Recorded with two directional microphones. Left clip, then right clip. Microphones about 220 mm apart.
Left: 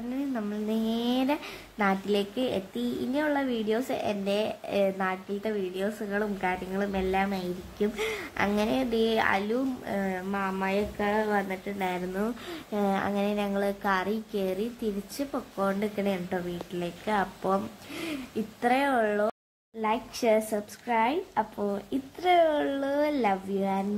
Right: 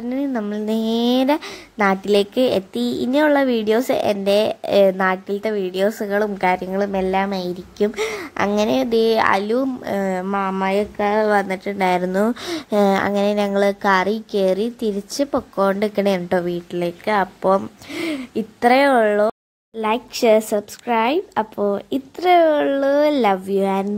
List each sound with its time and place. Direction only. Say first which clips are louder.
0.1 s a woman's voice: right 10 dB; 35° right (ahead or behind)